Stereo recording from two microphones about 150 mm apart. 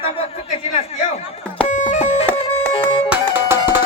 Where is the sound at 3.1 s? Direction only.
15° right (ahead or behind).